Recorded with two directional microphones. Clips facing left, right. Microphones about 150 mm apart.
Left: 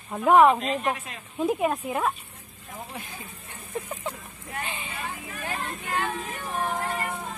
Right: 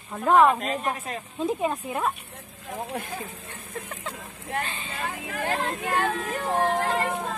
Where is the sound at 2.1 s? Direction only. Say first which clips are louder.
Right 5 dB; 75° right (ahead or behind).